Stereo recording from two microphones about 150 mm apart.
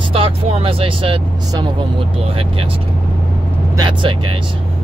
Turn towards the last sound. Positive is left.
turn(degrees=-30)  # may be behind; listen again after turning